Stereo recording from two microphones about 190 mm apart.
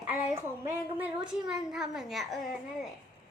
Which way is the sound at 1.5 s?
5° right (ahead or behind).